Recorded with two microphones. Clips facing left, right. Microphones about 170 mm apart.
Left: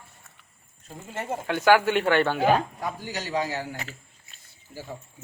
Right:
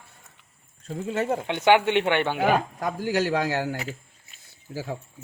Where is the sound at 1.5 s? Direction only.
20° right (ahead or behind).